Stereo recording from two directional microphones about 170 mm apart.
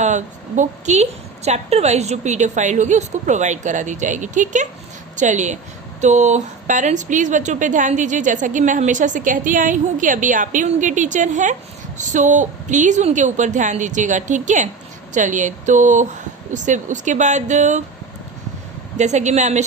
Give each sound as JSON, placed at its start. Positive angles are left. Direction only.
{"t": 0.0, "sound": "speech", "side_deg": -45}
{"t": 18.9, "sound": "speech", "side_deg": -45}